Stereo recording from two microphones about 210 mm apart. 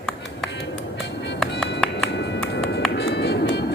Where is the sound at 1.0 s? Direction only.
55° left (ahead or behind).